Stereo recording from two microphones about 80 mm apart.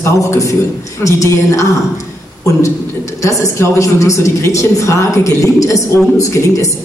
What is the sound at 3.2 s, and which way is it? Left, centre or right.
A woman's voice, left.